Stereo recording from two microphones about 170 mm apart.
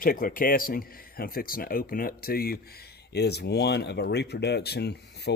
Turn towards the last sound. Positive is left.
turn(degrees=75)  # may be behind; listen again after turning